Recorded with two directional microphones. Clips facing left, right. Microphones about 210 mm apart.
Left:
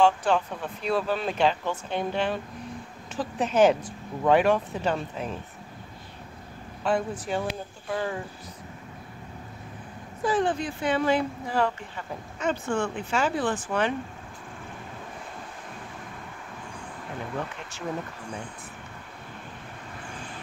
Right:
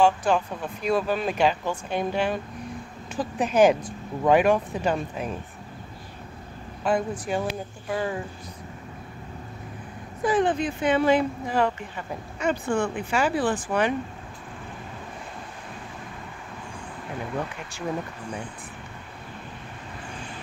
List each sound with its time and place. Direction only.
0.0 s speech: 10° right (ahead or behind)
6.8 s speech: 10° right (ahead or behind)
10.2 s speech: 20° right (ahead or behind)
17.4 s speech: 15° right (ahead or behind)